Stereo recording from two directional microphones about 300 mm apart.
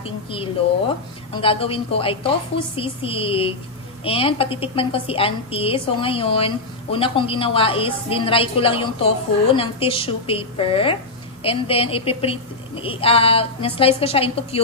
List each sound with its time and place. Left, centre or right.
0.0 s a woman's voice: centre